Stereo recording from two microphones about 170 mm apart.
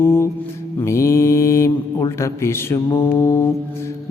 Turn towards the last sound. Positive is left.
turn(degrees=15)  # may be behind; listen again after turning